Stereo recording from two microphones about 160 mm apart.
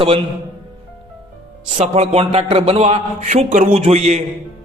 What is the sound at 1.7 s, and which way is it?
A man's voice, 40° right (ahead or behind).